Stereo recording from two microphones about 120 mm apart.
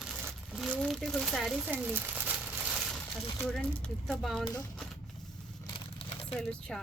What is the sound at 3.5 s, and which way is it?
Speech, 5° left (ahead or behind).